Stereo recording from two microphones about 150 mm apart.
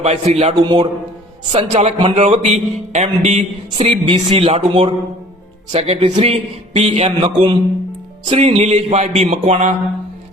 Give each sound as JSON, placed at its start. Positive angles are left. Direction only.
{"t": 0.0, "sound": "a man's voice", "side_deg": -45}
{"t": 0.6, "sound": "a man's voice", "side_deg": -30}